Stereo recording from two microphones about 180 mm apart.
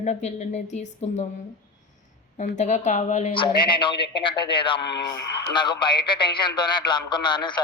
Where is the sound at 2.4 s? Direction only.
40° left (ahead or behind).